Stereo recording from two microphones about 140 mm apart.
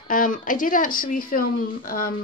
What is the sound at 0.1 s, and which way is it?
Speech, 75° left (ahead or behind).